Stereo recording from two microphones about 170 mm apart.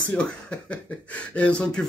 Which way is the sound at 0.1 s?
5° left (ahead or behind).